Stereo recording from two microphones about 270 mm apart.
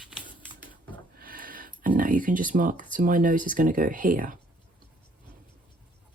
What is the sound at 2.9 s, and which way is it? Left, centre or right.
Speech, right.